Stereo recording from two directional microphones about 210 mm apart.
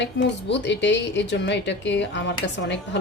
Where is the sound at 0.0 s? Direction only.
55° left (ahead or behind).